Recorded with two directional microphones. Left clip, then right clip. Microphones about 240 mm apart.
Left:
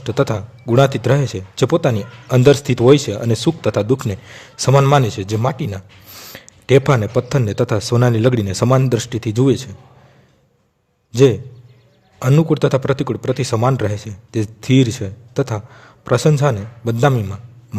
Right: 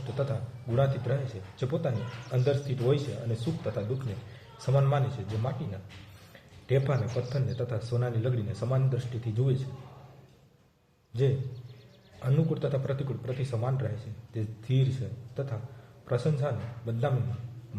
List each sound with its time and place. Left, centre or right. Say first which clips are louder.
0.0 s a man's voice: left 15 dB; left
12.2 s a man's voice: left 15 dB; left
16.0 s a man's voice: left 15 dB; left